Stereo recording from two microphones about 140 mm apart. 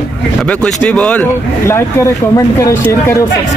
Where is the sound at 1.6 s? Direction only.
20° left (ahead or behind).